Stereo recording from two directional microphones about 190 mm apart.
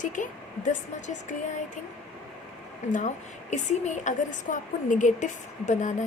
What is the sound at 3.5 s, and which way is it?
A woman's voice, 40° left (ahead or behind).